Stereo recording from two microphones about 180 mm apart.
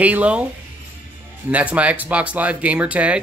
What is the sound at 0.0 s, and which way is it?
Speech, 5° right (ahead or behind).